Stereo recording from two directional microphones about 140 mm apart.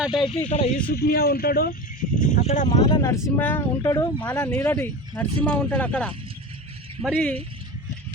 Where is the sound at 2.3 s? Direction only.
55° left (ahead or behind).